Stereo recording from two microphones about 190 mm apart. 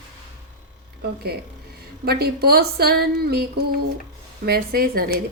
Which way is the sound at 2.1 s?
55° right (ahead or behind).